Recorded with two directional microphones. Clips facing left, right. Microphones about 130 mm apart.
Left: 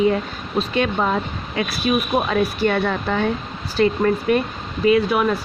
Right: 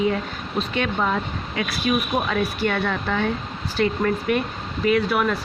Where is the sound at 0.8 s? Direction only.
35° left (ahead or behind).